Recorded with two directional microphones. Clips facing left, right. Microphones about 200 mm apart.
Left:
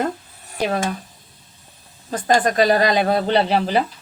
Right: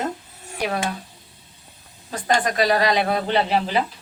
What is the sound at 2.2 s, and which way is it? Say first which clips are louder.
Speech: left 4 dB; 35° left (ahead or behind).